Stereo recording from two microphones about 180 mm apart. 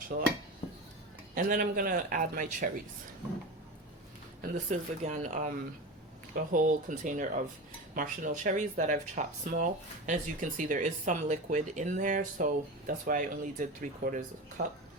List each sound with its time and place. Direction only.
0.1 s dishes: 65° right (ahead or behind)
1.4 s speech: 50° right (ahead or behind)
4.4 s speech: 45° right (ahead or behind)